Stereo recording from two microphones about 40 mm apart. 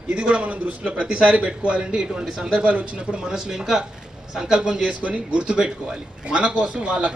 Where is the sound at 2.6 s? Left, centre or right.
Right.